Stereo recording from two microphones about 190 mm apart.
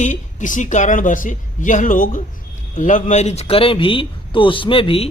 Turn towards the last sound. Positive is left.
turn(degrees=30)  # may be behind; listen again after turning